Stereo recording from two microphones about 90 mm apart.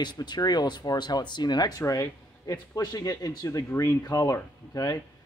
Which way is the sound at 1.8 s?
35° left (ahead or behind).